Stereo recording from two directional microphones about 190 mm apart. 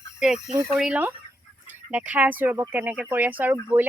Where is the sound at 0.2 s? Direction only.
5° right (ahead or behind).